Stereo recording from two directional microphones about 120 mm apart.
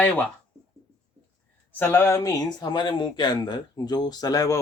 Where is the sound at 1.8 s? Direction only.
15° left (ahead or behind).